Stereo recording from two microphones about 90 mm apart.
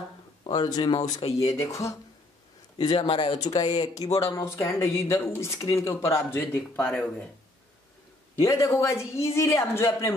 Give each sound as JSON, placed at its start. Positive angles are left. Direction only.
{"t": 0.5, "sound": "speech", "side_deg": 45}
{"t": 2.8, "sound": "speech", "side_deg": 50}
{"t": 3.1, "sound": "speech", "side_deg": 90}
{"t": 3.5, "sound": "speech", "side_deg": 45}
{"t": 6.9, "sound": "speech", "side_deg": 10}
{"t": 8.4, "sound": "speech", "side_deg": 35}